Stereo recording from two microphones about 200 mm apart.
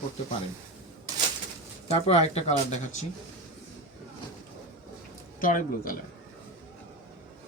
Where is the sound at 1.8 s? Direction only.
30° left (ahead or behind).